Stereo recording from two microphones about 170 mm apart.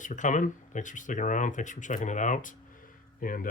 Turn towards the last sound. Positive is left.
turn(degrees=55)  # may be behind; listen again after turning